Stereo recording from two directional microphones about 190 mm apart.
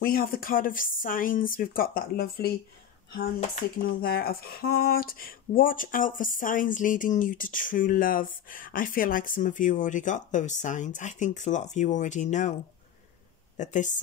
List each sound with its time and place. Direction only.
0.0 s speech: 50° left (ahead or behind)
4.0 s speech: 50° left (ahead or behind)
13.6 s speech: 40° left (ahead or behind)